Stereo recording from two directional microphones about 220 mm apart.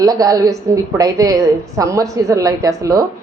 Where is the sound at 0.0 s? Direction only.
15° right (ahead or behind).